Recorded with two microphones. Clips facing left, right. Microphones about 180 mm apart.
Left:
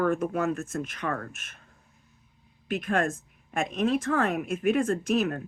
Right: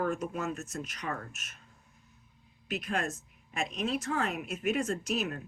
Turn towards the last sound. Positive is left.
turn(degrees=50)  # may be behind; listen again after turning